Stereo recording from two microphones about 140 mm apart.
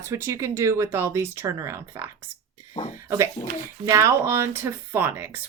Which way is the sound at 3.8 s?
25° right (ahead or behind).